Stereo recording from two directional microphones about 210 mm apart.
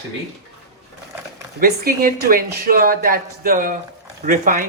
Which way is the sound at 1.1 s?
10° right (ahead or behind).